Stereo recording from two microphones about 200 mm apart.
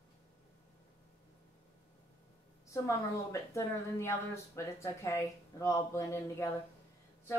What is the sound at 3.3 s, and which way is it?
Speech, 15° left (ahead or behind).